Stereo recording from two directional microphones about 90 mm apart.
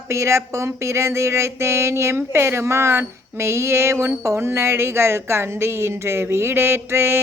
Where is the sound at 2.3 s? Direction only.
30° right (ahead or behind).